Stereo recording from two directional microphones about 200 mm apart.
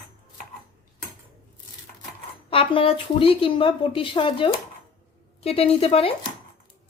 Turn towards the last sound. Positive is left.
turn(degrees=30)  # may be behind; listen again after turning